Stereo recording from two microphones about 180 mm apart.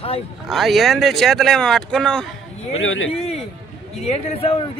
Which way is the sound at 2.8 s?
90° left.